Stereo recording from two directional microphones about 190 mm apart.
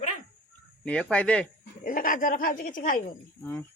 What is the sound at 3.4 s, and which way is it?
Speech, 10° left (ahead or behind).